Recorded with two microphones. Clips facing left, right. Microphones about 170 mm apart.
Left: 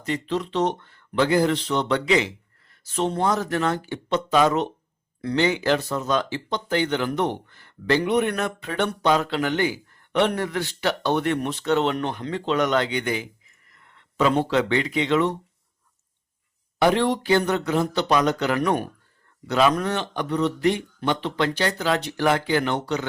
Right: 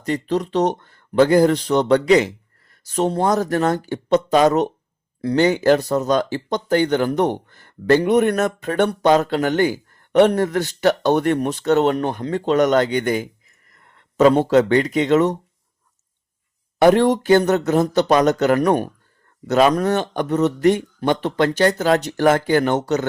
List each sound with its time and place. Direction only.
0.0 s speech: 40° right (ahead or behind)
16.7 s speech: 50° right (ahead or behind)